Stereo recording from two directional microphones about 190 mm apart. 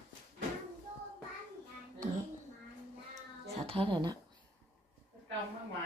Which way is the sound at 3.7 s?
25° right (ahead or behind).